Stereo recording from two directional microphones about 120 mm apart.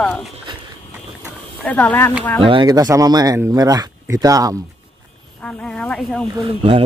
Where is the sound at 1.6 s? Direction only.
15° left (ahead or behind).